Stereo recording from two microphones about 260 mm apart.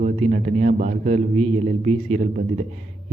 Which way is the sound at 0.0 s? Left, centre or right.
Right.